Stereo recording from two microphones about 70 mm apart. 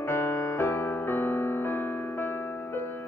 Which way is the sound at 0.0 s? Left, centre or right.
Left.